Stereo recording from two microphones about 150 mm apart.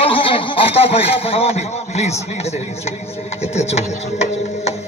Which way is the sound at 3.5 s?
45° left (ahead or behind).